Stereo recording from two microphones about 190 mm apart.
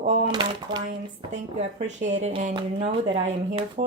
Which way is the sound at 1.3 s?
40° right (ahead or behind).